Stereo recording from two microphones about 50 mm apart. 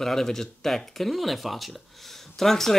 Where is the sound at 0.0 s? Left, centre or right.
Centre.